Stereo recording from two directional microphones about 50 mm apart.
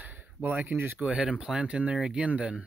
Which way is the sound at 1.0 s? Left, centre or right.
Right.